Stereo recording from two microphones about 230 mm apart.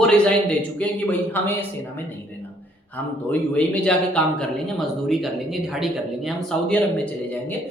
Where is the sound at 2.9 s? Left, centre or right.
Centre.